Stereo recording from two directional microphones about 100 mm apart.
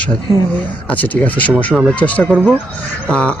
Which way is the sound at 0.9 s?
15° left (ahead or behind).